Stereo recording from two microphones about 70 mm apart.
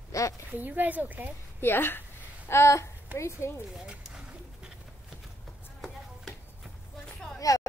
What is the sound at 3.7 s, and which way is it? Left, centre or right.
Bird, centre.